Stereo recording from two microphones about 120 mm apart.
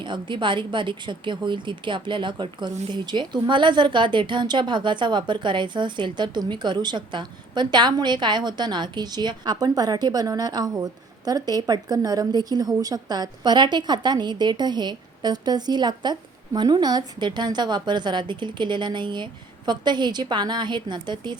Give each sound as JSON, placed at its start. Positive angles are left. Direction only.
{"t": 0.0, "sound": "a woman's voice", "side_deg": -40}